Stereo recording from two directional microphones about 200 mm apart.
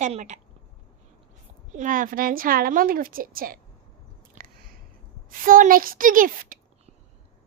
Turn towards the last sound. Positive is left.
turn(degrees=-45)  # may be behind; listen again after turning